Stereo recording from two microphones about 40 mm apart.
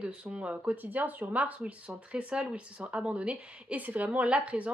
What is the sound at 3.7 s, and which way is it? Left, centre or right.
Speech, right.